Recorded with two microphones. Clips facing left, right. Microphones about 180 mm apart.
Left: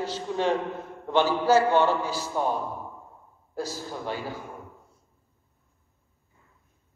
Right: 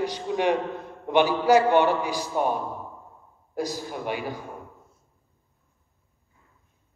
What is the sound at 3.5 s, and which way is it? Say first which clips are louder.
Speech: right 3 dB; 15° right (ahead or behind).